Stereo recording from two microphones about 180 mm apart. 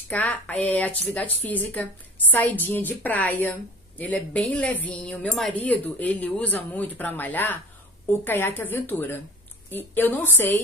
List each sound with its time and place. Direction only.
0.1 s a woman's voice: 10° left (ahead or behind)